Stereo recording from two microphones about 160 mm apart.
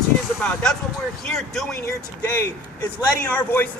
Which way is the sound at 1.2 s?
Centre (ahead or behind).